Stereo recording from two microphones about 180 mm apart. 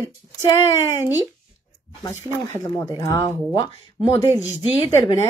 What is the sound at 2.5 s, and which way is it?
Speech, 15° left (ahead or behind).